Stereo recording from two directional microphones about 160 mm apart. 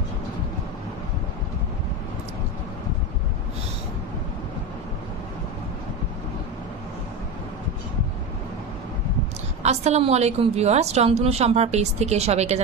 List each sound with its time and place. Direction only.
9.6 s a woman's voice: 45° right (ahead or behind)